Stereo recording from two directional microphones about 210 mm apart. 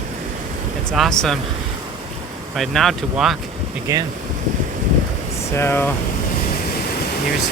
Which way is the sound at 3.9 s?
15° right (ahead or behind).